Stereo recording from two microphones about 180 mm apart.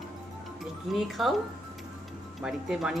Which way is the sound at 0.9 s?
Centre (ahead or behind).